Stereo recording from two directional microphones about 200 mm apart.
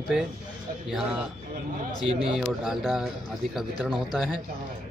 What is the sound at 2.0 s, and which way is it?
Speech, 30° right (ahead or behind).